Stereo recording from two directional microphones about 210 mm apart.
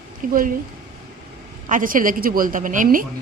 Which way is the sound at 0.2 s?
40° right (ahead or behind).